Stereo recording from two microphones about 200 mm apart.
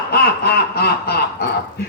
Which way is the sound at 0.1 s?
55° left (ahead or behind).